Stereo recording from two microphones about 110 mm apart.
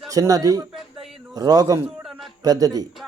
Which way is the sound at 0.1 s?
35° right (ahead or behind).